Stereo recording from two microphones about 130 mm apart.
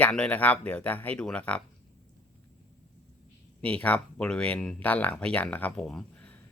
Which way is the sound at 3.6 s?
10° left (ahead or behind).